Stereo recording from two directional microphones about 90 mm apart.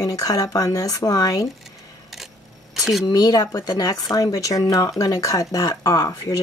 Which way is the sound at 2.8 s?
Centre (ahead or behind).